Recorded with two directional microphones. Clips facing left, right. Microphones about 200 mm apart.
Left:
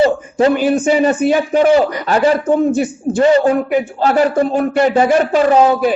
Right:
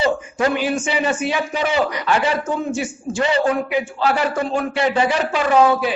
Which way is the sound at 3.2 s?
45° left (ahead or behind).